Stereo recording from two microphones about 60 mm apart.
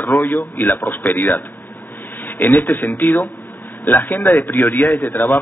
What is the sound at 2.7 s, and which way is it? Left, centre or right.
A man's voice, left.